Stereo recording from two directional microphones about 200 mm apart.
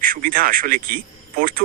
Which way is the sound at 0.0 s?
45° right (ahead or behind).